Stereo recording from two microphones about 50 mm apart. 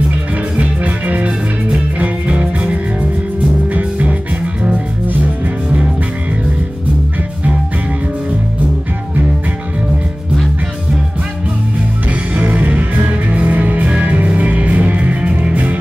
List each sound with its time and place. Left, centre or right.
0.6 s music: right
12.4 s music: right